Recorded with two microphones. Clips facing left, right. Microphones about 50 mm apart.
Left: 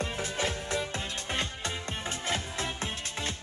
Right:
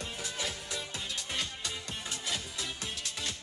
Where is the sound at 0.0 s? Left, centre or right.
Left.